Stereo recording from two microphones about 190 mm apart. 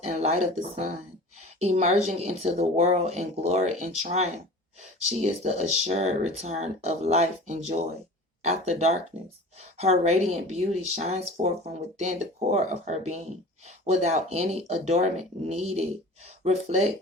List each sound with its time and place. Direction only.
0.0 s speech: 35° right (ahead or behind)